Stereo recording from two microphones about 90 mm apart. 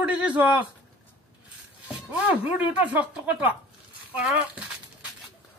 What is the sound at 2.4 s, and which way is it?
Speech, 15° right (ahead or behind).